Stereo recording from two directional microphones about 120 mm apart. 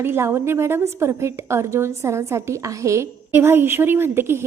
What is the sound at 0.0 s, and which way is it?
A woman's voice, 20° right (ahead or behind).